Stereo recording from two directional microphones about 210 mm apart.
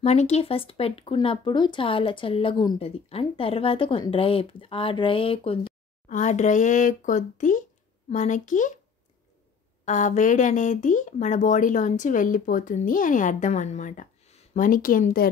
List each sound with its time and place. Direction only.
0.0 s speech: 30° left (ahead or behind)
9.8 s speech: 35° left (ahead or behind)